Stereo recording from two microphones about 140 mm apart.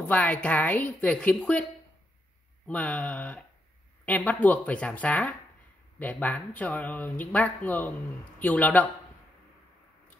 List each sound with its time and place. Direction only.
0.1 s speech: 10° left (ahead or behind)